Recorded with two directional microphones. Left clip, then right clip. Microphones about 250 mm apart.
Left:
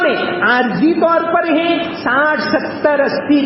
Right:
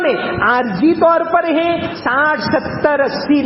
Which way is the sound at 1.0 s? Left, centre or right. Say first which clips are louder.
Right 2 dB; right.